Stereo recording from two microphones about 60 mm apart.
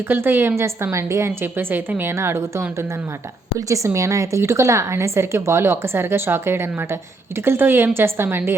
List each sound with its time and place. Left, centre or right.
0.1 s a woman's voice: right
1.5 s a woman's voice: right
2.1 s a woman's voice: right
3.8 s a woman's voice: right